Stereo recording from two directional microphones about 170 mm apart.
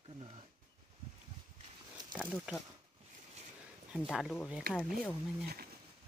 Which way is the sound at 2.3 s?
Centre (ahead or behind).